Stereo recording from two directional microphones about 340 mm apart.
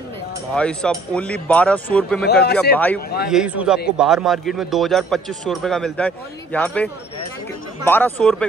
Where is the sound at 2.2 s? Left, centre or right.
Left.